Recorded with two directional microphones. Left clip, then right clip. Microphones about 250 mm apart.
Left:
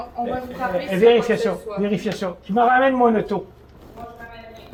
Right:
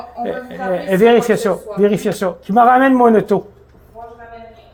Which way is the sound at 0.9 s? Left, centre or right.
Right.